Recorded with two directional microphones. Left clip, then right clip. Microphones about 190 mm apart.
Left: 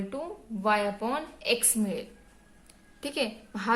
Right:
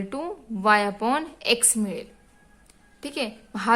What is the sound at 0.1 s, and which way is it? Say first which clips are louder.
A woman's voice: right 5 dB; 40° right (ahead or behind).